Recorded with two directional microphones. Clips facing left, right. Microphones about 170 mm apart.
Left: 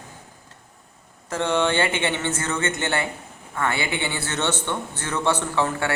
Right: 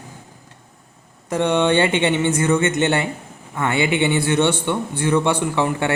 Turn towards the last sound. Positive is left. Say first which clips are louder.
# right 4 dB
turn(degrees=-20)  # may be behind; listen again after turning